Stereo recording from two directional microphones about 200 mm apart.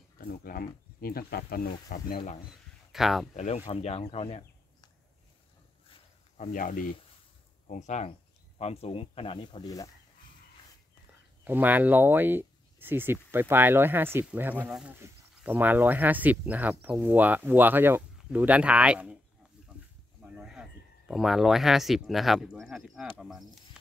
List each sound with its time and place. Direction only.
0.2 s speech: 45° left (ahead or behind)
2.9 s speech: centre (ahead or behind)
3.3 s speech: 35° left (ahead or behind)
6.3 s speech: 40° left (ahead or behind); by 9.8 s 20° left (ahead or behind)
11.4 s speech: 10° right (ahead or behind)
20.3 s a sound: 5° right (ahead or behind)
21.1 s speech: centre (ahead or behind)